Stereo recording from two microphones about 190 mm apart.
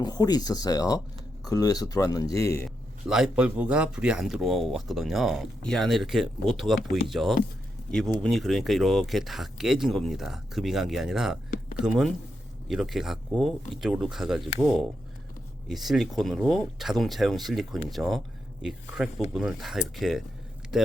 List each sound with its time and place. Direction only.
0.0 s speech: 20° left (ahead or behind)
2.6 s speech: 5° right (ahead or behind)